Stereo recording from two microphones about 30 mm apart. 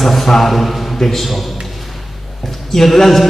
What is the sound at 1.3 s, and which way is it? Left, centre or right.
A man's voice, centre.